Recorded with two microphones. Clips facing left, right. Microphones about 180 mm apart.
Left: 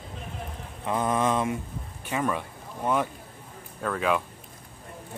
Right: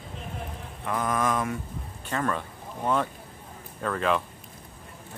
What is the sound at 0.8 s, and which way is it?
Mantra, 25° left (ahead or behind).